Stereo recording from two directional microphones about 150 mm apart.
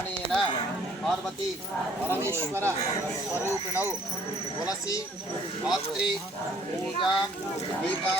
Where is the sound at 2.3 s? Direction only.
20° right (ahead or behind).